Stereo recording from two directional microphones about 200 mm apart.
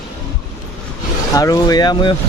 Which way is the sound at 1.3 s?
15° left (ahead or behind).